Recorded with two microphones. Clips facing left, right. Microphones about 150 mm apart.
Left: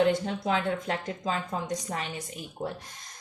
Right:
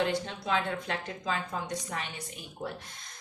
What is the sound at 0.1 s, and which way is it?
A woman's voice, 45° left (ahead or behind).